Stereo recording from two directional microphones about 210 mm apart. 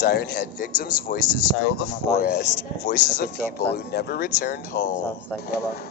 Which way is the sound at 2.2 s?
45° left (ahead or behind).